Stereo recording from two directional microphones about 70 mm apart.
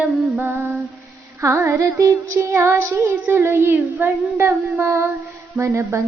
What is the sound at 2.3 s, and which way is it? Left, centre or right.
Child singing, right.